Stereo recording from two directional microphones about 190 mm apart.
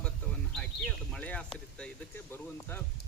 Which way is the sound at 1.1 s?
5° left (ahead or behind).